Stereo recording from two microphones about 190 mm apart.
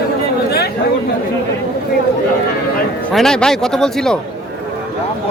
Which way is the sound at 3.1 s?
5° left (ahead or behind).